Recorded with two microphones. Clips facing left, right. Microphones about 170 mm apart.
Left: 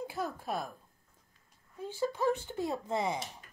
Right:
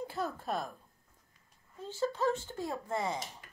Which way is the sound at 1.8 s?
15° left (ahead or behind).